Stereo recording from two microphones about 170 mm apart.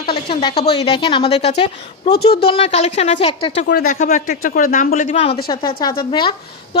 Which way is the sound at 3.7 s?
65° left (ahead or behind).